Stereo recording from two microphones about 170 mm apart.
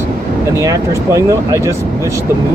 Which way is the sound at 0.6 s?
20° right (ahead or behind).